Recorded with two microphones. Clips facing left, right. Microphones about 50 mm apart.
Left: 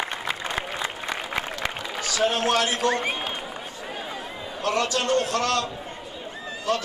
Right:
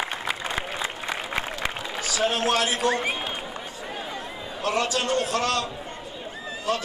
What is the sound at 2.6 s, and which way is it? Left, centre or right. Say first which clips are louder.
Speech: even; centre.